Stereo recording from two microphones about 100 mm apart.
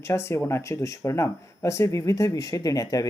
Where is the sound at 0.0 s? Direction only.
25° left (ahead or behind).